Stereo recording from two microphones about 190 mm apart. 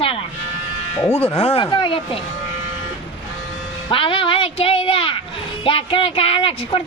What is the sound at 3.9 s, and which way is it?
A woman's voice, 25° left (ahead or behind).